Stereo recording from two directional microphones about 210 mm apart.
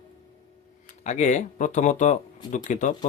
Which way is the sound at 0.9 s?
35° left (ahead or behind).